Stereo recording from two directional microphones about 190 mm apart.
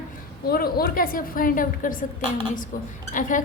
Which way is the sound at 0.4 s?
55° left (ahead or behind).